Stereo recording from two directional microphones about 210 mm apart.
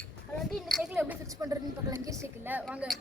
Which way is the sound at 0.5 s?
Centre (ahead or behind).